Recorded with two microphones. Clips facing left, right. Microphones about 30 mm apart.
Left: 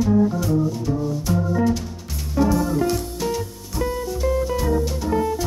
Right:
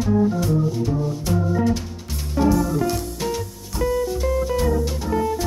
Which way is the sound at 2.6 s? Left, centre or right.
Centre.